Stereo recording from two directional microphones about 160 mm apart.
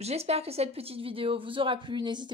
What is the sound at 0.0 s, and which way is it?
A woman's voice, 40° right (ahead or behind).